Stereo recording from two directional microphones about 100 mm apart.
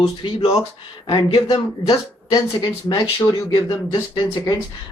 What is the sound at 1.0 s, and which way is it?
Speech, 45° left (ahead or behind).